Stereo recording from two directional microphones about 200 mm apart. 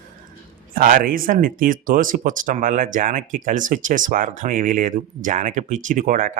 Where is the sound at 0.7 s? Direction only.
45° right (ahead or behind).